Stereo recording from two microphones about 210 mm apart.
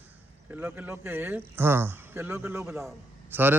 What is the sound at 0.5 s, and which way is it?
Speech, 10° right (ahead or behind).